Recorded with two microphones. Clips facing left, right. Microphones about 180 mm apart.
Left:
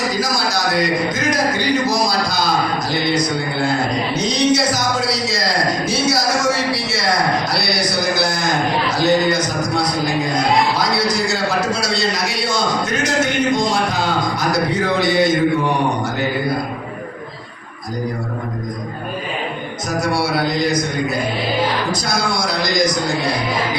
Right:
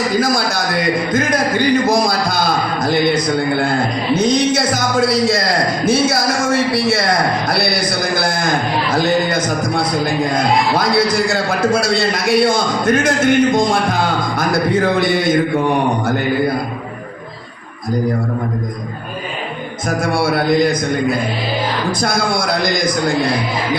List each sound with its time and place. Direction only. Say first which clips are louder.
0.2 s a man's voice: right 3 dB; 55° right (ahead or behind)
20.0 s a man's voice: right 2 dB; 55° right (ahead or behind)